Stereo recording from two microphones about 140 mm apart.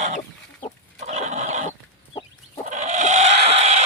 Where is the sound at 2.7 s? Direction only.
60° right (ahead or behind).